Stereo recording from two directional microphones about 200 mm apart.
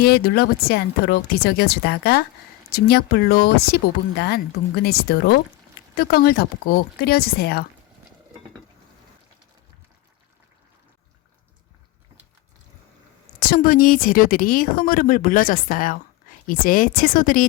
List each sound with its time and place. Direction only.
0.0 s speech: 50° left (ahead or behind)
13.5 s speech: 45° left (ahead or behind)